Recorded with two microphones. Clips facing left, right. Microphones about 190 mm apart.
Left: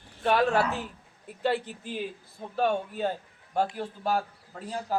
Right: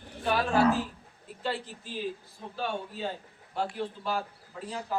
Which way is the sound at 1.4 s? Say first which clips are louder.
Left 6 dB; 60° left (ahead or behind).